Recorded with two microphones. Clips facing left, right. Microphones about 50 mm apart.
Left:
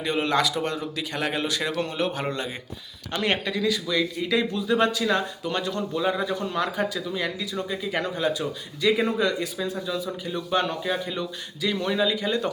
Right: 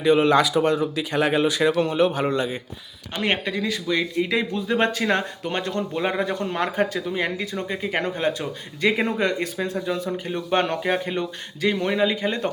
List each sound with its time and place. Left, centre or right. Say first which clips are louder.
0.0 s speech: right 6 dB; centre
3.1 s speech: right 1 dB; right